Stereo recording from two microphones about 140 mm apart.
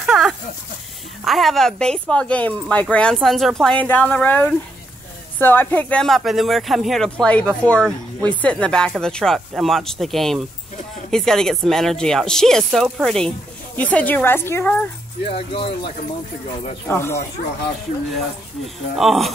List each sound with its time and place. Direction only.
0.0 s a sound: centre (ahead or behind)
1.2 s speech: centre (ahead or behind)
15.2 s speech: 45° left (ahead or behind)
16.8 s speech: 15° left (ahead or behind)
18.9 s speech: centre (ahead or behind)